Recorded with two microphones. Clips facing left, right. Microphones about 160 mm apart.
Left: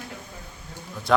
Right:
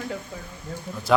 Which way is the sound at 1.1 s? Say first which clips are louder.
Right 1 dB; centre (ahead or behind).